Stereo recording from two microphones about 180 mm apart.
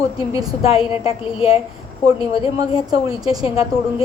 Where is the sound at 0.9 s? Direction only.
30° left (ahead or behind).